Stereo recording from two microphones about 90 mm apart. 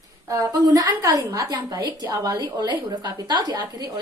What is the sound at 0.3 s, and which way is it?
A woman's voice, 40° right (ahead or behind).